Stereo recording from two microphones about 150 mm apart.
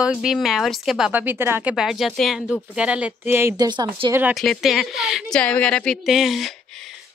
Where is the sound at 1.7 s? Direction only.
5° right (ahead or behind).